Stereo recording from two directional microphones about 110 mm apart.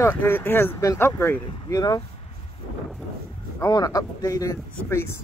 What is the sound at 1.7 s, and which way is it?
Speech, 40° left (ahead or behind).